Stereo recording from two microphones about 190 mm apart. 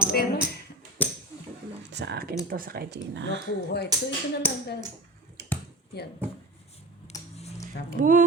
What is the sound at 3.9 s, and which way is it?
Speech, 20° right (ahead or behind).